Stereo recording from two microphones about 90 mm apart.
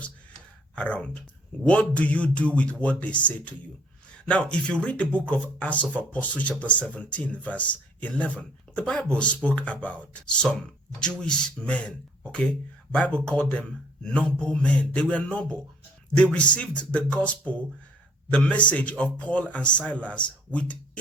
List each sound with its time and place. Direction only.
0.8 s speech: 15° left (ahead or behind)